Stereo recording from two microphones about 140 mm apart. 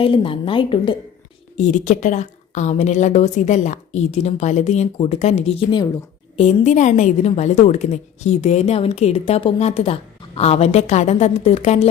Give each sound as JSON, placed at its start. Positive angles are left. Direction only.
{"t": 0.0, "sound": "a woman's voice", "side_deg": 40}
{"t": 1.5, "sound": "a woman's voice", "side_deg": 60}